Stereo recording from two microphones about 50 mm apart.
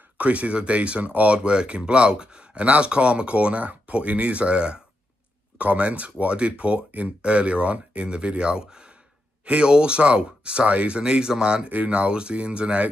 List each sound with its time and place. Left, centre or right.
0.2 s speech: right